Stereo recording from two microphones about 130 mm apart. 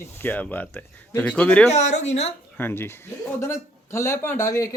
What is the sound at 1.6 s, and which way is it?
Speech, 60° left (ahead or behind).